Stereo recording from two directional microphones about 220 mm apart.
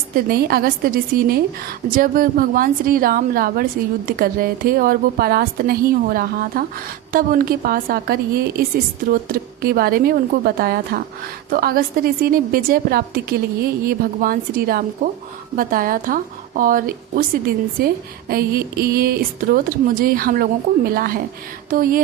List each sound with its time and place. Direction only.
0.3 s a woman's voice: 45° right (ahead or behind)